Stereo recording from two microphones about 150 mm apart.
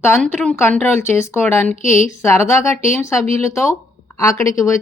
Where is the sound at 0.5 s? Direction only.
15° left (ahead or behind).